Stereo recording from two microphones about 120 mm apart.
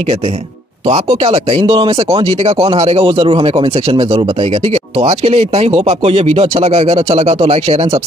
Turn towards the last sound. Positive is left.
turn(degrees=-55)  # may be behind; listen again after turning